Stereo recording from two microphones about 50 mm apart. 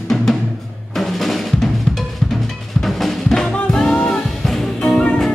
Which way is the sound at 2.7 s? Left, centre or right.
Centre.